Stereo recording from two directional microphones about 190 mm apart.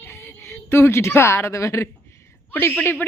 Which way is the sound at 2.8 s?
10° left (ahead or behind).